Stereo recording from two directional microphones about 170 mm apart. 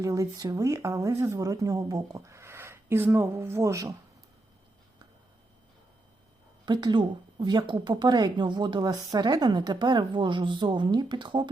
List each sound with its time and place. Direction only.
0.0 s speech: 20° right (ahead or behind)
6.7 s speech: 25° right (ahead or behind)